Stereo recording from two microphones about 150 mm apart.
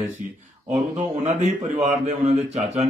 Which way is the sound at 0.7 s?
50° right (ahead or behind).